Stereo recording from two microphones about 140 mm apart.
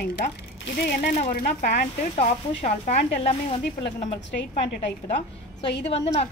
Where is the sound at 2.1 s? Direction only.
50° left (ahead or behind).